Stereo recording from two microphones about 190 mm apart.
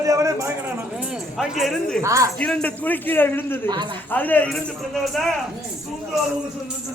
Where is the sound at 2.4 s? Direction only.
5° left (ahead or behind).